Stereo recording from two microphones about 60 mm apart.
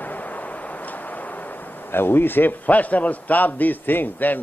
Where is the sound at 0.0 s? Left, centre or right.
Left.